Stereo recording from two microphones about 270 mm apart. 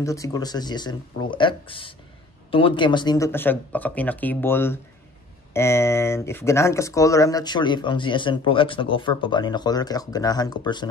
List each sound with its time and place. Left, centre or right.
0.0 s speech: centre